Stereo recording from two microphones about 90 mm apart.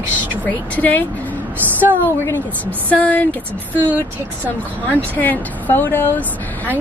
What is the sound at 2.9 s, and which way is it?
Speech, 15° left (ahead or behind).